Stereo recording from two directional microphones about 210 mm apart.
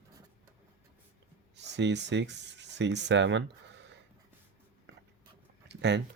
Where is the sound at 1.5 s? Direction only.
55° right (ahead or behind).